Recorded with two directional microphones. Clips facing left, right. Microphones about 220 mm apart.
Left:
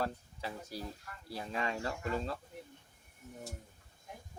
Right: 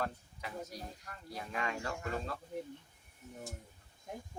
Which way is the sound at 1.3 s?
30° left (ahead or behind).